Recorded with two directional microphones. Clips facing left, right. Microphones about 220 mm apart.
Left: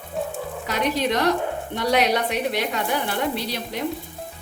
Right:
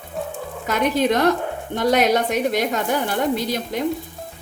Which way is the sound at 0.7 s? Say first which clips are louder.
Right 4 dB; 50° right (ahead or behind).